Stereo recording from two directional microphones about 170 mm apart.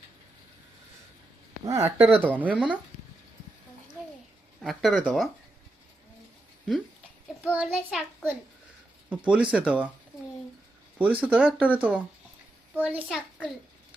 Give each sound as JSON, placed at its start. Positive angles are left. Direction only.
{"t": 1.6, "sound": "speech", "side_deg": -15}
{"t": 4.6, "sound": "speech", "side_deg": 0}
{"t": 7.5, "sound": "speech", "side_deg": -5}
{"t": 10.9, "sound": "speech", "side_deg": -10}